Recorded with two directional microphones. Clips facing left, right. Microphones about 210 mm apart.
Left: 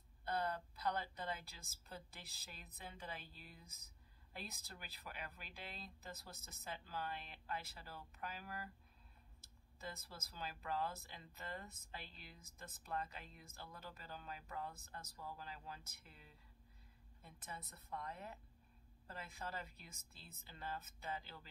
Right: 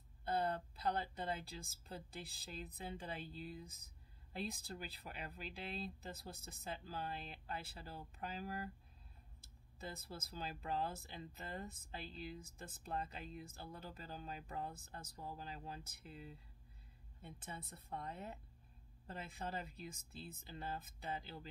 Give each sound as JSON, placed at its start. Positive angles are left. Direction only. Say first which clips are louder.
{"t": 0.2, "sound": "speech", "louder": "right 3 dB", "side_deg": -30}
{"t": 9.9, "sound": "speech", "louder": "right 5 dB", "side_deg": -30}